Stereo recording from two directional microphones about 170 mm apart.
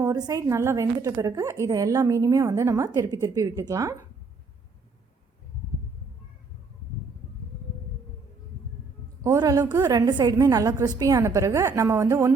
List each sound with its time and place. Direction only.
0.0 s a woman's voice: 20° right (ahead or behind)
9.2 s a woman's voice: 20° right (ahead or behind)